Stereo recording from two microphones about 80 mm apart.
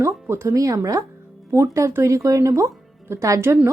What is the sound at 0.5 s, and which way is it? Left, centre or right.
Speech, right.